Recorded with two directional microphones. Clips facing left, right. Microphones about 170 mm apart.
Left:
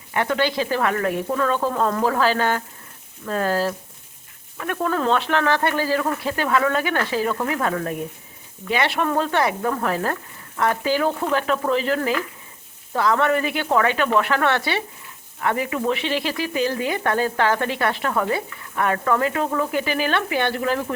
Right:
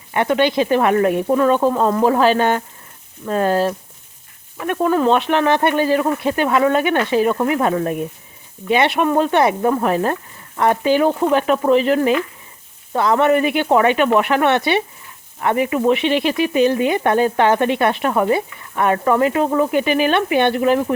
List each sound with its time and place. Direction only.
0.1 s speech: 20° right (ahead or behind)